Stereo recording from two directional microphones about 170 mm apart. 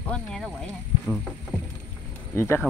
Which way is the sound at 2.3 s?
15° left (ahead or behind).